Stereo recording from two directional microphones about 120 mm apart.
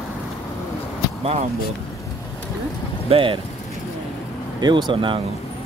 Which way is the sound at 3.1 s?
50° right (ahead or behind).